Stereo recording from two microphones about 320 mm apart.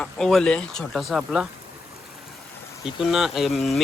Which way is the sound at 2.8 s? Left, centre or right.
Centre.